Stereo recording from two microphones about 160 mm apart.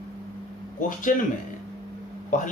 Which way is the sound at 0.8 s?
55° left (ahead or behind).